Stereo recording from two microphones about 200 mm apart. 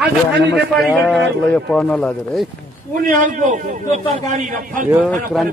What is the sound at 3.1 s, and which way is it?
A man's voice, 40° right (ahead or behind).